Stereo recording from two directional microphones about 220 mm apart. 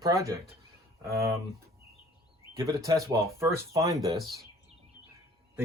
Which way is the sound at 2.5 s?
15° right (ahead or behind).